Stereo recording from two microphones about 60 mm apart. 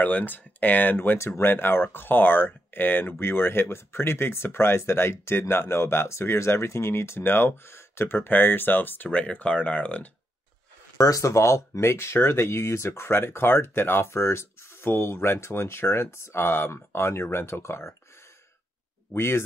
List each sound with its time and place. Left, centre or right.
0.0 s speech: left
0.9 s speech: left
9.1 s speech: centre
11.0 s speech: left
19.1 s speech: left